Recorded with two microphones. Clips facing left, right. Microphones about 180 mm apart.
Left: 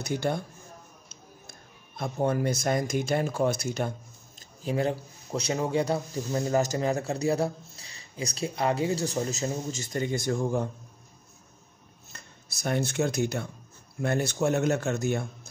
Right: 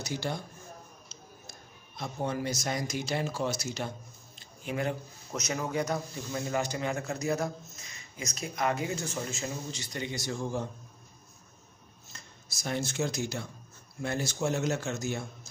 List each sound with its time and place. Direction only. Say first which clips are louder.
0.0 s speech: left 6 dB; 55° left (ahead or behind)
1.5 s speech: left 1 dB; 55° left (ahead or behind)
4.4 s a man's voice: left 5 dB; 35° left (ahead or behind); by 10.7 s 50° left (ahead or behind)
12.1 s speech: left 2 dB; 60° left (ahead or behind)